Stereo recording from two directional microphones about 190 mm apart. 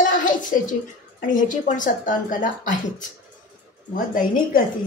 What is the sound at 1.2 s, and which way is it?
Speech, 40° left (ahead or behind).